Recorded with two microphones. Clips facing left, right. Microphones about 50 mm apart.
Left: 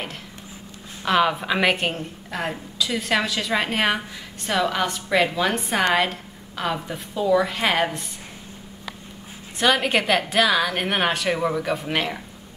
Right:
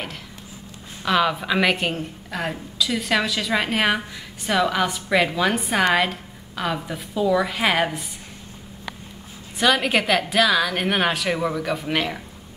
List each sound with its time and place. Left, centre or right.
1.0 s a woman's voice: centre
9.6 s a woman's voice: centre